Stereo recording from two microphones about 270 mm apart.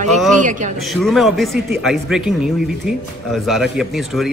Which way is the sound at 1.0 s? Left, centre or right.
Centre.